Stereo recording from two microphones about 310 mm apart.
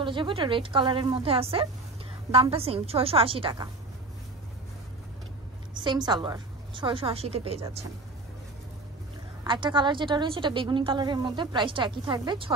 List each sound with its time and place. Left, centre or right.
0.0 s a woman's voice: centre
5.9 s a woman's voice: centre
9.4 s a woman's voice: centre